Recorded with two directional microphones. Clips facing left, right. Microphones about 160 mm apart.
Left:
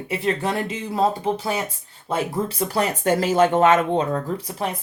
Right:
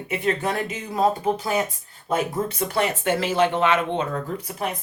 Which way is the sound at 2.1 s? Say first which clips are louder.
Even; 30° left (ahead or behind).